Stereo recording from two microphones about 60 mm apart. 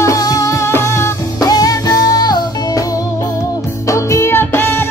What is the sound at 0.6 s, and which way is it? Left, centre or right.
Music, left.